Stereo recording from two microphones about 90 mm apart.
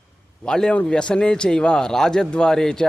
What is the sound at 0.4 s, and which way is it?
A man's voice, 10° left (ahead or behind).